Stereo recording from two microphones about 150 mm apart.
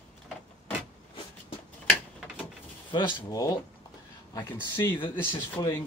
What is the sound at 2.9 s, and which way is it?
Speech, 30° left (ahead or behind).